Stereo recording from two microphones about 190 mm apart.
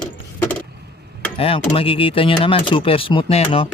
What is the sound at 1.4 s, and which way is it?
Speech, 30° left (ahead or behind).